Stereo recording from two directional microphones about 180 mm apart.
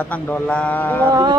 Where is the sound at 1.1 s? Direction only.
20° right (ahead or behind).